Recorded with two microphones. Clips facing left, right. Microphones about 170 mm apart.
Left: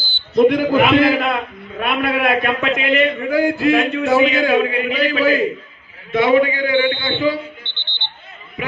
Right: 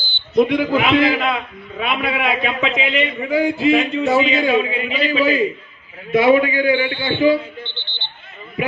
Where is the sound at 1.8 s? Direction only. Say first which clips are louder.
Left 3 dB; centre (ahead or behind).